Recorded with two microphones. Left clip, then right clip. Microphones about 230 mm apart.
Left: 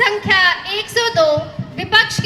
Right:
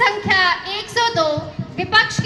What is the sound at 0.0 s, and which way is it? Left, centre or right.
Music, left.